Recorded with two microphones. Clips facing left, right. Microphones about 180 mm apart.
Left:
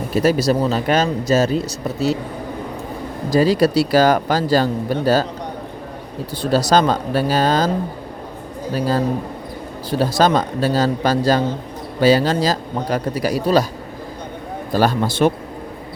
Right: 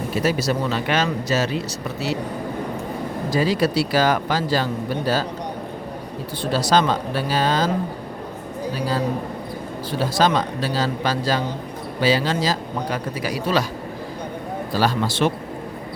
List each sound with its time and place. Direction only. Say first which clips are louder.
0.2 s speech: left 6 dB; 40° left (ahead or behind)
3.2 s speech: left 6 dB; 40° left (ahead or behind)
6.4 s speech: left 4 dB; 40° left (ahead or behind)
10.0 s a man's voice: left 3 dB; 45° left (ahead or behind)
14.7 s a man's voice: left 4 dB; 50° left (ahead or behind)